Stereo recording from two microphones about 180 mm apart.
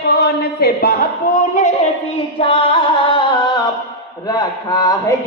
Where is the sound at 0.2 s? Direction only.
60° left (ahead or behind).